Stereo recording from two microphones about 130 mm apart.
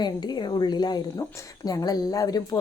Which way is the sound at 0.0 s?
35° left (ahead or behind).